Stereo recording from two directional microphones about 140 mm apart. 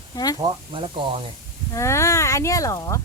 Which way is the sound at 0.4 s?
35° right (ahead or behind).